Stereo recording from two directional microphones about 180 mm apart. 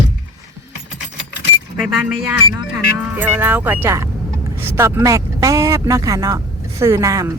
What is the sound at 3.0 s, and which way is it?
Speech, 10° right (ahead or behind).